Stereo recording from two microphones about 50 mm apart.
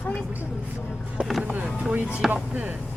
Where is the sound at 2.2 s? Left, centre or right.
Centre.